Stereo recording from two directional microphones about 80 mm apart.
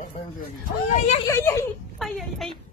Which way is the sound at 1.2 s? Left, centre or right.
Left.